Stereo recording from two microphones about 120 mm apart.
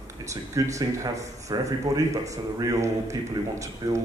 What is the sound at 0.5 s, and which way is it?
A man's voice, 25° right (ahead or behind).